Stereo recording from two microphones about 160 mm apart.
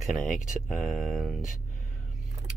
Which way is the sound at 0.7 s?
Centre (ahead or behind).